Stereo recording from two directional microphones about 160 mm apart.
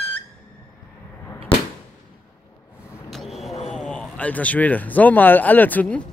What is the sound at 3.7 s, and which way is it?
Speech, 5° left (ahead or behind).